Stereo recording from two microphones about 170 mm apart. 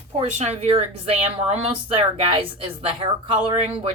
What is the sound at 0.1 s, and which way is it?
A woman's voice, 40° right (ahead or behind).